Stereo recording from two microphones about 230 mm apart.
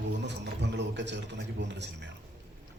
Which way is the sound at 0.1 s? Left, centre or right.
Right.